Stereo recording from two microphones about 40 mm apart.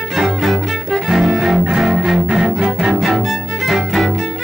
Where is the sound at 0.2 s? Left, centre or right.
Centre.